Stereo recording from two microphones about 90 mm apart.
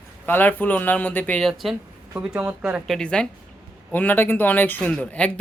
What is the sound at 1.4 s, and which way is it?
Speech, centre (ahead or behind).